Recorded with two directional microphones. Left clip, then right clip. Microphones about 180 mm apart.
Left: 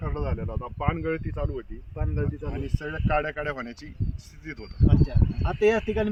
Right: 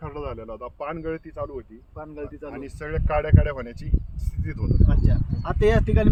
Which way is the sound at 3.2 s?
70° right (ahead or behind).